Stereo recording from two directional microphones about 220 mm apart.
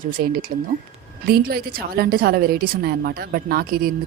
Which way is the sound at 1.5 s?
45° right (ahead or behind).